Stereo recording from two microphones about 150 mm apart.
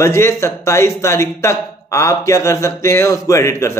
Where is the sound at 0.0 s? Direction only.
20° left (ahead or behind).